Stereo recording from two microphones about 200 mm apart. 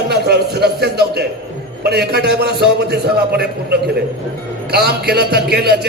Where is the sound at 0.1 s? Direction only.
55° right (ahead or behind).